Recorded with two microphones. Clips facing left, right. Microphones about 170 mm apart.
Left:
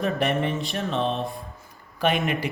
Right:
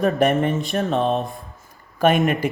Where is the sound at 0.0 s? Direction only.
45° right (ahead or behind).